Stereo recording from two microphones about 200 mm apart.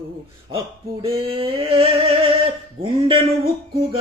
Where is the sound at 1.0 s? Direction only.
25° right (ahead or behind).